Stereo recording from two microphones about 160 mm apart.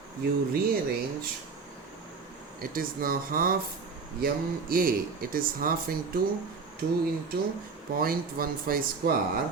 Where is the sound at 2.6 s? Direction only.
65° right (ahead or behind).